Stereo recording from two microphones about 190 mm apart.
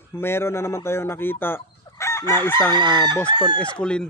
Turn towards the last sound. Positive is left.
turn(degrees=5)  # may be behind; listen again after turning